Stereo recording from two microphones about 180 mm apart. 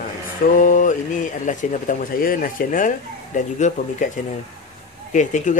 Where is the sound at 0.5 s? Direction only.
45° left (ahead or behind).